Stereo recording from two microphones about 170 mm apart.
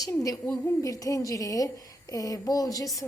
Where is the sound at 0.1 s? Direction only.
20° left (ahead or behind).